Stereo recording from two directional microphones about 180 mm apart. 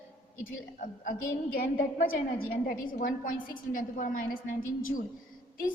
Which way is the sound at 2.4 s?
50° left (ahead or behind).